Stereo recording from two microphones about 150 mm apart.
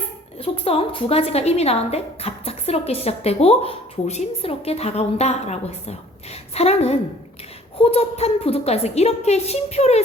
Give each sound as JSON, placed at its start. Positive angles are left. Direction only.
{"t": 0.3, "sound": "a woman's voice", "side_deg": 40}